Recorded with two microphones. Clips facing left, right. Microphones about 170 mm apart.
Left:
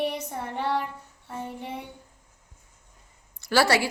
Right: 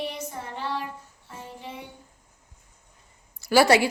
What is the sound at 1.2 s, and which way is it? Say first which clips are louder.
Music: left 5 dB; 60° left (ahead or behind).